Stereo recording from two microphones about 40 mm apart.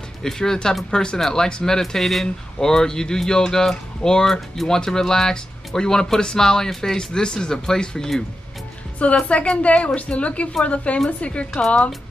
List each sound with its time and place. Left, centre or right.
0.2 s speech: centre
9.0 s a woman's voice: left